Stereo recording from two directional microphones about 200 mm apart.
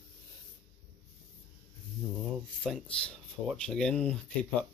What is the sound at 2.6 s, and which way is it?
Speech, centre (ahead or behind).